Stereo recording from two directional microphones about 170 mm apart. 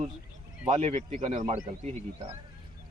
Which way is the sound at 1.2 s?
45° right (ahead or behind).